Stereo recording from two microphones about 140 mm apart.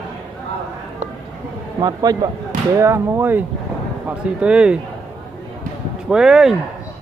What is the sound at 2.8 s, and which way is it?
Speech, 15° right (ahead or behind).